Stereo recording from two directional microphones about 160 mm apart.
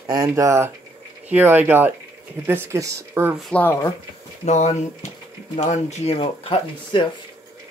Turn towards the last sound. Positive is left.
turn(degrees=35)  # may be behind; listen again after turning